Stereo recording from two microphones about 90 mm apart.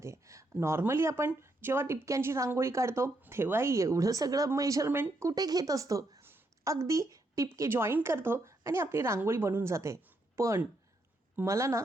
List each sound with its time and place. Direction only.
0.0 s a woman's voice: 35° right (ahead or behind)
4.9 s speech: 25° right (ahead or behind)
5.3 s a woman's voice: 45° right (ahead or behind)